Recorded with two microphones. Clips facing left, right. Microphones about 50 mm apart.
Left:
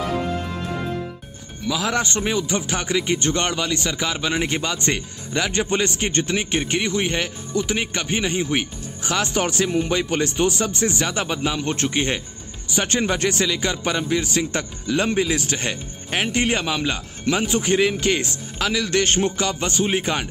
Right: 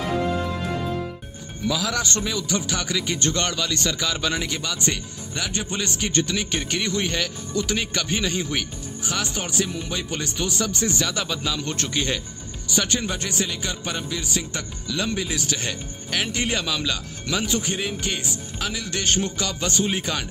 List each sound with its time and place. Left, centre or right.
1.8 s a man's voice: left
4.4 s a man's voice: left
9.0 s speech: left
12.8 s a man's voice: left
17.6 s a man's voice: left